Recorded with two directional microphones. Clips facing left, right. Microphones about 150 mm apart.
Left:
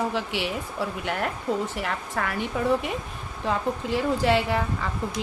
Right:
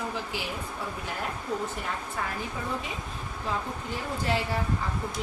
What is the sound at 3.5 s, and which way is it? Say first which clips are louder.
A woman's voice: left 7 dB; 85° left.